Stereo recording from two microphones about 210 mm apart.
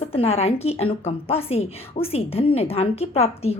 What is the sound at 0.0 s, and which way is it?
A woman's voice, 30° left (ahead or behind).